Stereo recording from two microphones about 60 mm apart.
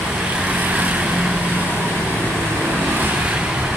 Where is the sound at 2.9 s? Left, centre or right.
Right.